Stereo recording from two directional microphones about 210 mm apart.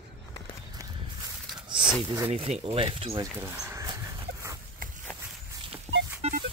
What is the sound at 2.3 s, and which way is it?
Speech, 30° right (ahead or behind).